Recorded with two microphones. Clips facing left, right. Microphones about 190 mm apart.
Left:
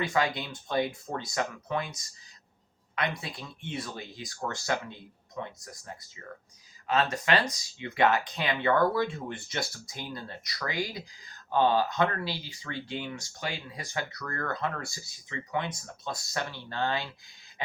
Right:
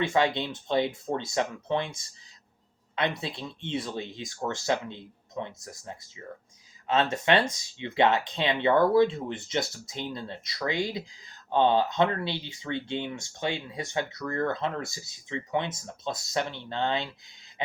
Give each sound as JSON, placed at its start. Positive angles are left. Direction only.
{"t": 0.0, "sound": "speech", "side_deg": -25}